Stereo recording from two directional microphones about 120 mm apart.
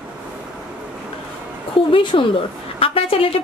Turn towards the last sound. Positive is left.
turn(degrees=50)  # may be behind; listen again after turning